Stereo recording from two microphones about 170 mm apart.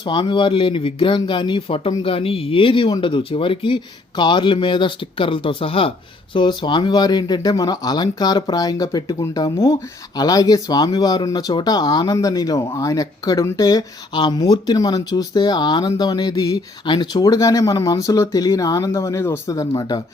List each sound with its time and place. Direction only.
0.0 s speech: 30° left (ahead or behind)